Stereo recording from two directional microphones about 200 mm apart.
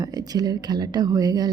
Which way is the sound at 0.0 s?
20° right (ahead or behind).